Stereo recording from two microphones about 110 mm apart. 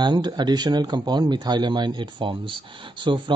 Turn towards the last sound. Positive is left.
turn(degrees=-50)  # may be behind; listen again after turning